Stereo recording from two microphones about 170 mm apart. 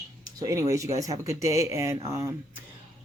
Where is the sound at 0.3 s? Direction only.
20° right (ahead or behind).